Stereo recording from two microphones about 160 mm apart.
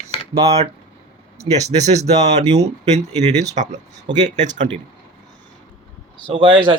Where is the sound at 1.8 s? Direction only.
45° right (ahead or behind).